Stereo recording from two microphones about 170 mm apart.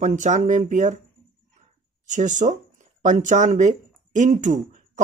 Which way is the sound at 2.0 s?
45° right (ahead or behind).